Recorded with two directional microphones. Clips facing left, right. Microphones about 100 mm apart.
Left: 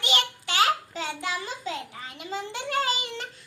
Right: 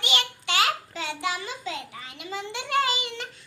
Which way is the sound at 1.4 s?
40° left (ahead or behind).